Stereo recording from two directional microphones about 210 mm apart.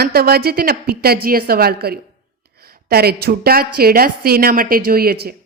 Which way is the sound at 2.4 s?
45° right (ahead or behind).